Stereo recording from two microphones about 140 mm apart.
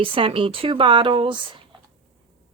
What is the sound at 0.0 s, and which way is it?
Speech, 40° right (ahead or behind).